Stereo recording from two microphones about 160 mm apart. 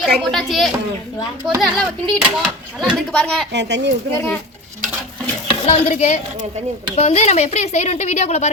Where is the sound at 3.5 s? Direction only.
90° right.